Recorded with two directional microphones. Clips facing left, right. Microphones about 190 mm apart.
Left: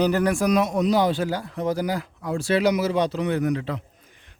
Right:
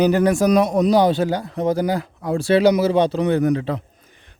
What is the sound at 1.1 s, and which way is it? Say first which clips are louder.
A man's voice: right 5 dB; 25° right (ahead or behind).